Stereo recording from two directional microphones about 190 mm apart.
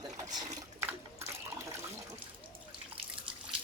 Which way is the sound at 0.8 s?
15° right (ahead or behind).